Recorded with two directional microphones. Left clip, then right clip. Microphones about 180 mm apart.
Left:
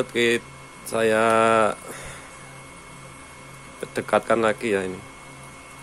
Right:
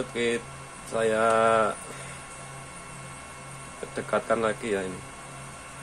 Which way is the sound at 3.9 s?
35° left (ahead or behind).